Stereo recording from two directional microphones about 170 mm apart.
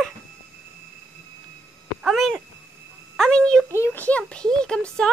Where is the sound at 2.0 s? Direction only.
Centre (ahead or behind).